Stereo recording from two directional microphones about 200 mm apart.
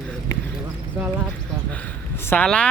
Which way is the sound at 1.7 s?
10° left (ahead or behind).